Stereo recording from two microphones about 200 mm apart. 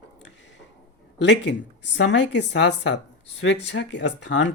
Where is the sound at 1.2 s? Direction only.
60° left (ahead or behind).